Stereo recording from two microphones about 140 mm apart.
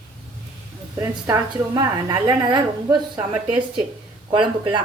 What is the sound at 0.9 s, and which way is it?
A woman's voice, 25° right (ahead or behind).